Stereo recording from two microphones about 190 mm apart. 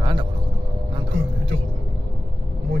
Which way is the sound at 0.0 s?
25° right (ahead or behind).